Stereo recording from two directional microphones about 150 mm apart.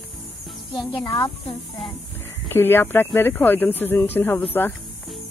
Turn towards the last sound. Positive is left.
turn(degrees=15)  # may be behind; listen again after turning